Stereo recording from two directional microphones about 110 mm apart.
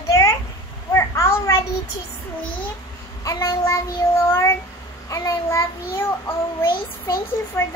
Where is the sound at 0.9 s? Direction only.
25° left (ahead or behind).